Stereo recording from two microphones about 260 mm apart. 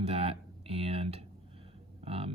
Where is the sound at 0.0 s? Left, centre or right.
Right.